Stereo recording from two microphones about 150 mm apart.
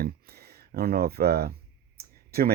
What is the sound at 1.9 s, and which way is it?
Clicking, 90° right.